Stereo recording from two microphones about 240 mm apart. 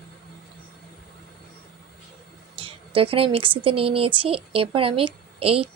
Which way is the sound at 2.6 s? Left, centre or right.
Right.